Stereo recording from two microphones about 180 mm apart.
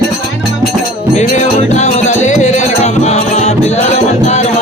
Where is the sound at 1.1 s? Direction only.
40° left (ahead or behind).